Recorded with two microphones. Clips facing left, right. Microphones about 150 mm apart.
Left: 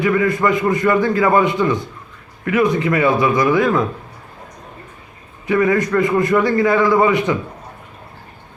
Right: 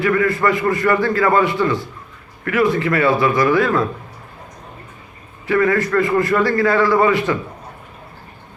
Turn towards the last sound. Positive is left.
turn(degrees=20)  # may be behind; listen again after turning